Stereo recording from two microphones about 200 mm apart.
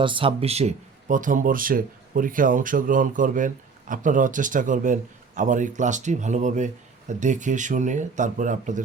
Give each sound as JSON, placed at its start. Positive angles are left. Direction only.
{"t": 0.0, "sound": "speech", "side_deg": -25}